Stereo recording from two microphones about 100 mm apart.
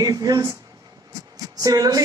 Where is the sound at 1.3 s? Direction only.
40° right (ahead or behind).